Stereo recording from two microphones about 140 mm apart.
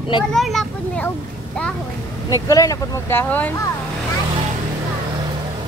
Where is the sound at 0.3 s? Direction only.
Centre (ahead or behind).